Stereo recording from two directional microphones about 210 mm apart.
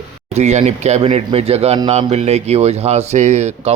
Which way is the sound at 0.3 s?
30° right (ahead or behind).